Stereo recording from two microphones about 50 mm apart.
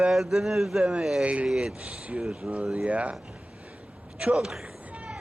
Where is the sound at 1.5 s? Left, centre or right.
Centre.